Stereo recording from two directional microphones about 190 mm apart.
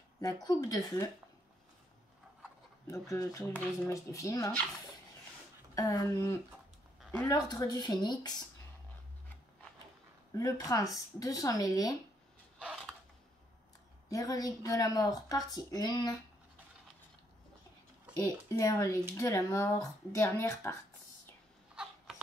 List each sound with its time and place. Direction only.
0.2 s speech: 20° left (ahead or behind)
2.9 s speech: 15° left (ahead or behind)
5.8 s speech: 20° left (ahead or behind)
10.3 s speech: 20° left (ahead or behind)
14.0 s speech: 20° left (ahead or behind)
18.1 s speech: 20° left (ahead or behind)